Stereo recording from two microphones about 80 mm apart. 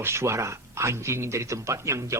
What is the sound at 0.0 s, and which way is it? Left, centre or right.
Speech, right.